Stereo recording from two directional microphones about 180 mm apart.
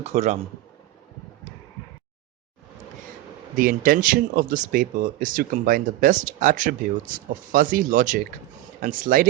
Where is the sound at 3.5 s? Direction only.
55° right (ahead or behind).